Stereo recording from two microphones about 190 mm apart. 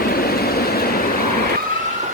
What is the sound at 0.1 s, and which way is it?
Vehicle, 55° left (ahead or behind).